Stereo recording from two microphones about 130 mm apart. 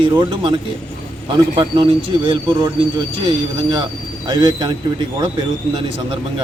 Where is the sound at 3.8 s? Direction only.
35° right (ahead or behind).